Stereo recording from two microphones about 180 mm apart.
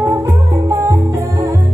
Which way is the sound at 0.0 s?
15° right (ahead or behind).